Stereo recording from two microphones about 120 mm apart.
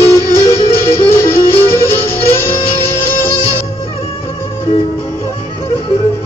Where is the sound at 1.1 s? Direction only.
20° left (ahead or behind).